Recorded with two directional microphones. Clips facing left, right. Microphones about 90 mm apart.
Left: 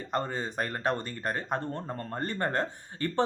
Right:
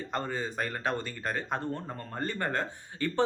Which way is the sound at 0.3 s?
35° left (ahead or behind).